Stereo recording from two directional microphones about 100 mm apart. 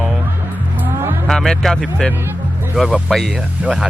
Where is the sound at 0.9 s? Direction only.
20° right (ahead or behind).